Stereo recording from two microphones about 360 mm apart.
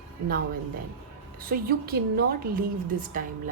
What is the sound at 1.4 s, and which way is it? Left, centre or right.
A woman's voice, right.